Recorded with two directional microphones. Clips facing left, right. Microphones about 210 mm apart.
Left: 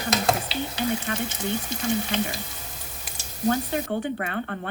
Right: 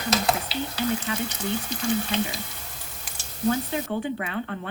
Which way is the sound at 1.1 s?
50° left (ahead or behind).